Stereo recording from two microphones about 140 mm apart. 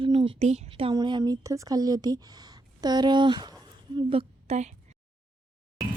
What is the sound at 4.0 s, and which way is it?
Speech, 40° right (ahead or behind).